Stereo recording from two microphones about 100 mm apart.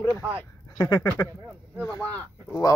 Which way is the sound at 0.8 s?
30° left (ahead or behind).